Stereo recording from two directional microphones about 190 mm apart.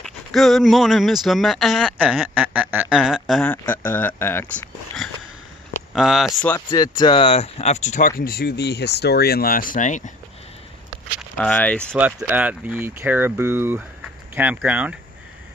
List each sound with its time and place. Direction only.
0.0 s speech: centre (ahead or behind)
5.9 s speech: centre (ahead or behind)
6.4 s speech: 15° left (ahead or behind); by 8.1 s 40° left (ahead or behind)
8.2 s speech: 55° left (ahead or behind); by 10.1 s 40° left (ahead or behind)
11.1 s speech: 5° left (ahead or behind)
11.9 s speech: 10° right (ahead or behind)